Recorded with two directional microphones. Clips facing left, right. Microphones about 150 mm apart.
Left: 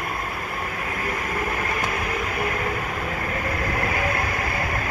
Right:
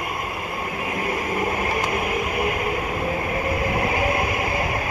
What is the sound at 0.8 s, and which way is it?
Train, 20° right (ahead or behind).